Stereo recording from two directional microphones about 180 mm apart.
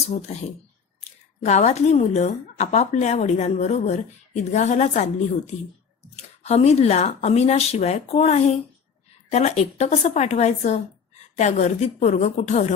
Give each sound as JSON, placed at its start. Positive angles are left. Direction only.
{"t": 0.1, "sound": "a woman's voice", "side_deg": 40}
{"t": 1.5, "sound": "a woman's voice", "side_deg": 40}